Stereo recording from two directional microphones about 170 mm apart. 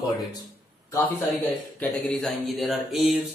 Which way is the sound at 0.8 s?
20° left (ahead or behind).